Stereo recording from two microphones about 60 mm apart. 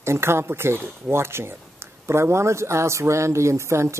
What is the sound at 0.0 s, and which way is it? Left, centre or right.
A man's voice, right.